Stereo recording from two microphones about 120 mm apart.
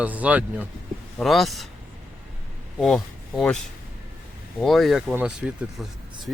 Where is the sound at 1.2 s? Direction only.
Centre (ahead or behind).